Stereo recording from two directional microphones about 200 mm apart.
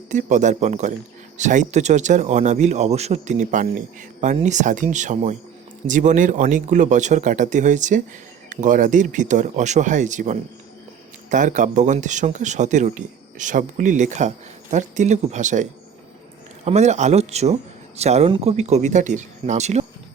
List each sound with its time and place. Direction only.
0.1 s a man's voice: 40° right (ahead or behind)
16.6 s a man's voice: 35° right (ahead or behind)